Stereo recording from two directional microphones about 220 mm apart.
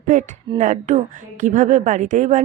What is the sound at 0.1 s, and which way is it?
A woman's voice, 35° right (ahead or behind).